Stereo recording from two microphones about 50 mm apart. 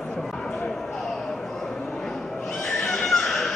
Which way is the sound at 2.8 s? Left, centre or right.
Centre.